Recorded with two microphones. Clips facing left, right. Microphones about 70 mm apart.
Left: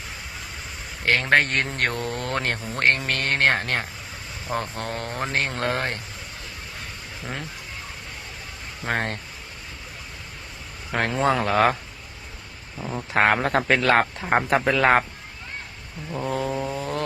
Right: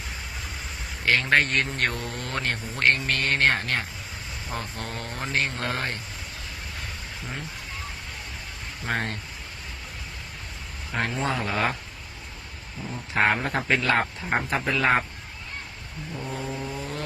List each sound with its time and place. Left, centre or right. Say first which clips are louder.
1.0 s speech: left 2 dB; left
8.9 s speech: left 3 dB; left
10.9 s speech: left 5 dB; left
12.9 s speech: left 3 dB; left
16.1 s speech: left 7 dB; left